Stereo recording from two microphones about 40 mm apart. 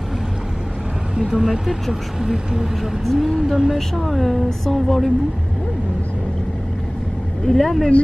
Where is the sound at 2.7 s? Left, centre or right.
Centre.